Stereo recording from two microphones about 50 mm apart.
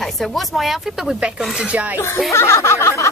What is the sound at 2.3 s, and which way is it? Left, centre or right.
Speech, left.